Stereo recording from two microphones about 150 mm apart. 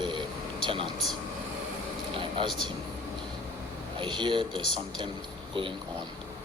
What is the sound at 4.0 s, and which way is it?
Speech, 30° right (ahead or behind).